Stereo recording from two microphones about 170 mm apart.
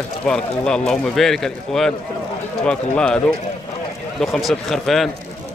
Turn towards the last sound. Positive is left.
turn(degrees=0)  # may be behind; listen again after turning